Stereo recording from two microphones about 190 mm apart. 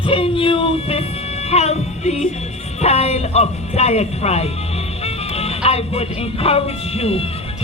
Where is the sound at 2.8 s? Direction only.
35° left (ahead or behind).